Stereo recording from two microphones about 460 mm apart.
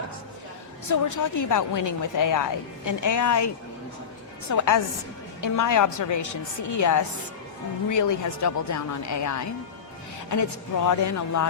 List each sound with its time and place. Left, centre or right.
0.9 s speech: left
4.5 s speech: left
10.8 s speech: left